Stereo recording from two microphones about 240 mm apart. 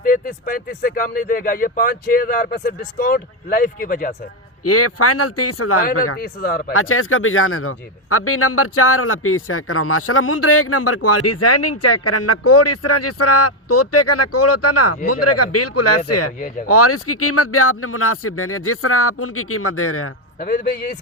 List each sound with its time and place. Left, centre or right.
0.0 s speech: left
4.6 s a man's voice: left
6.1 s speech: left
6.7 s a man's voice: left
20.4 s speech: left